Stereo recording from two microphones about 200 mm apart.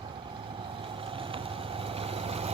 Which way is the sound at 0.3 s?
25° right (ahead or behind).